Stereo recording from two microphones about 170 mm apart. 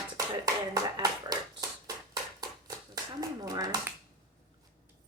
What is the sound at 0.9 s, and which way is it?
Speech, 25° right (ahead or behind).